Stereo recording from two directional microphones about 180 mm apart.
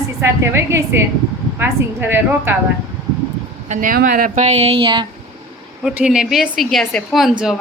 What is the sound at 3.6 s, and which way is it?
A woman's voice, 45° right (ahead or behind).